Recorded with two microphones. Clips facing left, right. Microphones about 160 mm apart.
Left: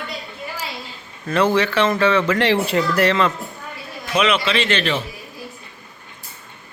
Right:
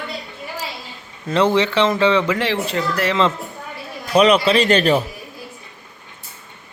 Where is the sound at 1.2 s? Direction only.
20° right (ahead or behind).